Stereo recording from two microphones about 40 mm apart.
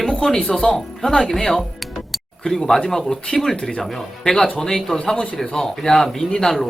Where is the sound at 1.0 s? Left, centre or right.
Centre.